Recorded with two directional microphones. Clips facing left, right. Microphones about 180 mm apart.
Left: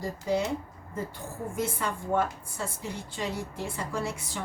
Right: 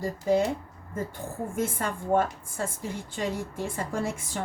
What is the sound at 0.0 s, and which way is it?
Speech, 50° right (ahead or behind).